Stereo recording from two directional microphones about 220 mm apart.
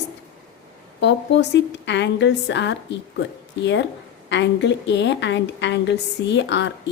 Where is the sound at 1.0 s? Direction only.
55° left (ahead or behind).